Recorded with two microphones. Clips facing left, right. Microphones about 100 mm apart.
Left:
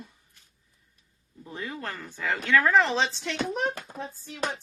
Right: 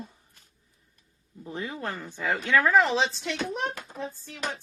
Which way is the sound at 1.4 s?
20° right (ahead or behind).